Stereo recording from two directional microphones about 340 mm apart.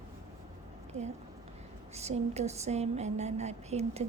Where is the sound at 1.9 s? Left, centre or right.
Centre.